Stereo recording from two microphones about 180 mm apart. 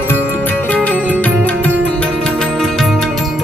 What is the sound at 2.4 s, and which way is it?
Music, centre (ahead or behind).